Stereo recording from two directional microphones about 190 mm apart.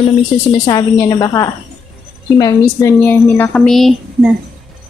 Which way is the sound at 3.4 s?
5° left (ahead or behind).